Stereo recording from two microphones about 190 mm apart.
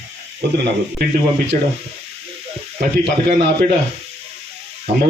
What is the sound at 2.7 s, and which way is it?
Frying, 30° right (ahead or behind).